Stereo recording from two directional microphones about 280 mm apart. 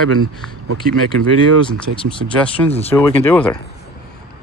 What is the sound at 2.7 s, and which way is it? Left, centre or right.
Speech, left.